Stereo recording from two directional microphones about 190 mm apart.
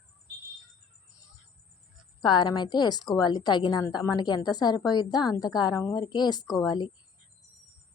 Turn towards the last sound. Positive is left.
turn(degrees=20)  # may be behind; listen again after turning